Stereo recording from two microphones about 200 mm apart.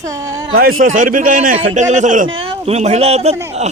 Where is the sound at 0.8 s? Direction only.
40° right (ahead or behind).